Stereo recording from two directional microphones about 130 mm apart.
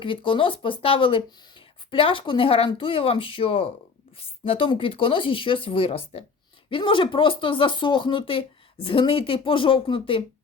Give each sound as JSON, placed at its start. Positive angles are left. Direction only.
{"t": 0.0, "sound": "speech", "side_deg": 40}